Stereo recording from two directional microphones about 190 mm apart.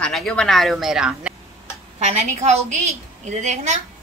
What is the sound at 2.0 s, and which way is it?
A woman's voice, 35° right (ahead or behind).